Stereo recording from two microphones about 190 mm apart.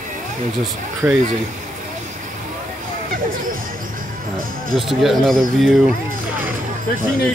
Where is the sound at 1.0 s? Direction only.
10° right (ahead or behind).